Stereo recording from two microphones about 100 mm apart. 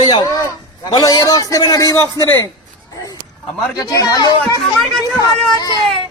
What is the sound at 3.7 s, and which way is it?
Speech, 35° left (ahead or behind).